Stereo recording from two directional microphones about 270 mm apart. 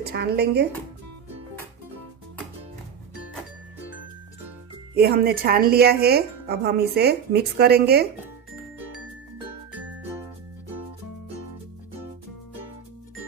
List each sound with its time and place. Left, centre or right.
0.1 s a woman's voice: right
4.9 s a woman's voice: right